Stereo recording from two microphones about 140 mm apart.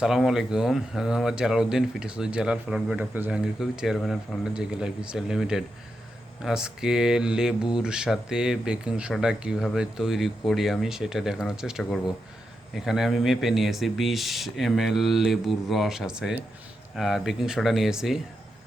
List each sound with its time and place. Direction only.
0.0 s speech: 5° right (ahead or behind)